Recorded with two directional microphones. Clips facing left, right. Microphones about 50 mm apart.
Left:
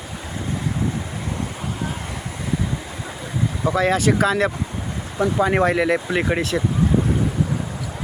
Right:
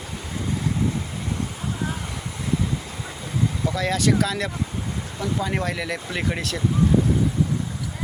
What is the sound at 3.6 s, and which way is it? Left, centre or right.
Speech, left.